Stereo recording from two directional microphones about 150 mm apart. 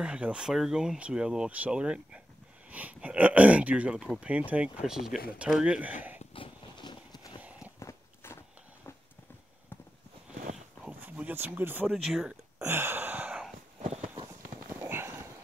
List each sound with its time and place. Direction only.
0.0 s speech: 5° right (ahead or behind)
6.3 s horse: 35° left (ahead or behind)
7.4 s walk: 10° right (ahead or behind)
7.8 s walk: 15° left (ahead or behind)
10.5 s a sound: 5° right (ahead or behind)
11.9 s speech: centre (ahead or behind)
12.6 s a sound: 15° right (ahead or behind)
13.7 s clip-clop: 50° right (ahead or behind)
14.9 s dog: 15° right (ahead or behind)